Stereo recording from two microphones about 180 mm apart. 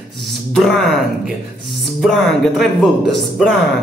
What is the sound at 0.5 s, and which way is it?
Speech, centre (ahead or behind).